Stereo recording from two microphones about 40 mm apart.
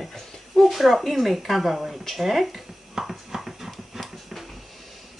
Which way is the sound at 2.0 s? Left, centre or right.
Centre.